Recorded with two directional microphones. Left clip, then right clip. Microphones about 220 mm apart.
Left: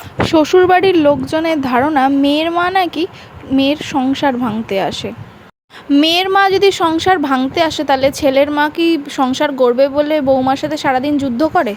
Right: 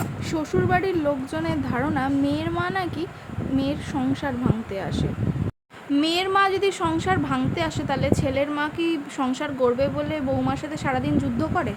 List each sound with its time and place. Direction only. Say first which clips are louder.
0.2 s a woman's voice: left 16 dB; 35° left (ahead or behind)